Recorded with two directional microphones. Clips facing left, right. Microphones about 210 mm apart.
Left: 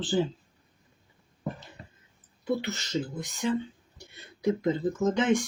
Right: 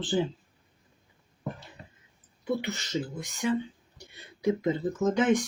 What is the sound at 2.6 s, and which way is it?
Speech, 15° right (ahead or behind).